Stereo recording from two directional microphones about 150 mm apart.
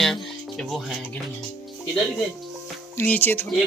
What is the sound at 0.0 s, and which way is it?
Music, centre (ahead or behind).